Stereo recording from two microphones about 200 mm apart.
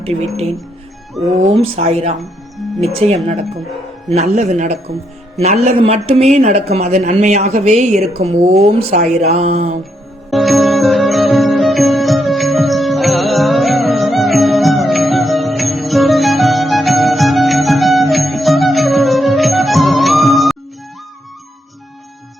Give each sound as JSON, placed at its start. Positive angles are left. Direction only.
{"t": 1.4, "sound": "a man's voice", "side_deg": -30}
{"t": 10.2, "sound": "music", "side_deg": 0}